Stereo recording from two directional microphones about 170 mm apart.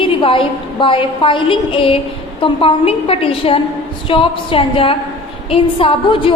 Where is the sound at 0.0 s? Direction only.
30° left (ahead or behind).